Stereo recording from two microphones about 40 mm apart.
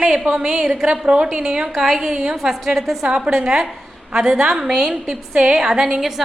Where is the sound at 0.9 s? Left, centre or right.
Right.